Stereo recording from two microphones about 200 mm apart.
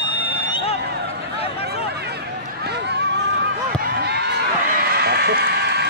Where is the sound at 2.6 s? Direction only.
55° right (ahead or behind).